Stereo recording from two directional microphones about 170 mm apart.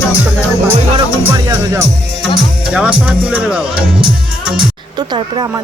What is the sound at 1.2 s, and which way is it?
Speech, 15° right (ahead or behind).